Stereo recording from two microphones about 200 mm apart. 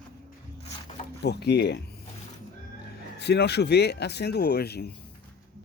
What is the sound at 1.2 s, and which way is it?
Speech, 55° left (ahead or behind).